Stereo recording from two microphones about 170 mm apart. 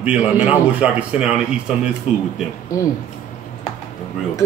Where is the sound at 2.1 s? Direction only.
35° left (ahead or behind).